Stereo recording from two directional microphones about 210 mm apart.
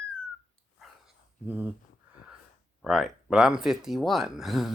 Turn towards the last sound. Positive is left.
turn(degrees=0)  # may be behind; listen again after turning